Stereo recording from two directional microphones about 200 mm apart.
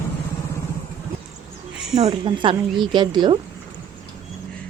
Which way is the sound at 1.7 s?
Centre (ahead or behind).